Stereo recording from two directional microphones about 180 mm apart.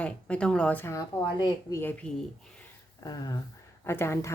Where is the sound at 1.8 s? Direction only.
10° left (ahead or behind).